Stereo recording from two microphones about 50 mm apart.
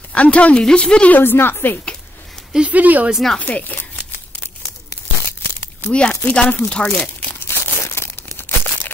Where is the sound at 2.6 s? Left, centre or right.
Right.